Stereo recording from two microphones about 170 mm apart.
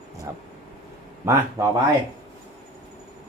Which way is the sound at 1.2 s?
15° right (ahead or behind).